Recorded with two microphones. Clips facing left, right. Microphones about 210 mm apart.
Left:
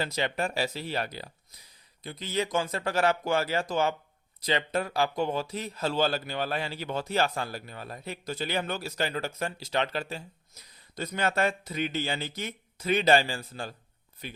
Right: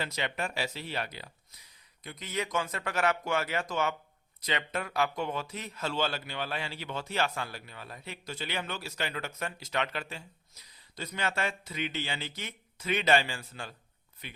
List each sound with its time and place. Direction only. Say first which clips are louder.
0.0 s speech: left 5 dB; 35° left (ahead or behind)